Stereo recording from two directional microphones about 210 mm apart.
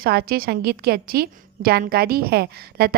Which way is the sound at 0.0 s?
45° right (ahead or behind).